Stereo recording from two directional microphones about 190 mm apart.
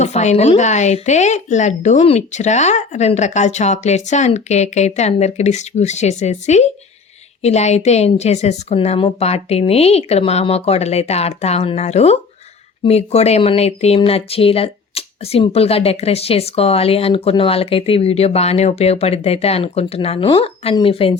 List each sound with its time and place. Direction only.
0.0 s speech: 35° left (ahead or behind)